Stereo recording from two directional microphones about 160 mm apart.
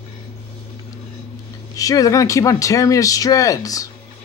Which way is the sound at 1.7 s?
20° left (ahead or behind).